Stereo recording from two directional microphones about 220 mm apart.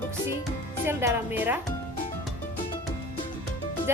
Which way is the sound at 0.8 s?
10° right (ahead or behind).